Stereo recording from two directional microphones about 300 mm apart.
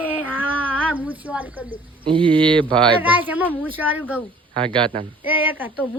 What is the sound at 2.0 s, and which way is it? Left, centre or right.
Speech, centre.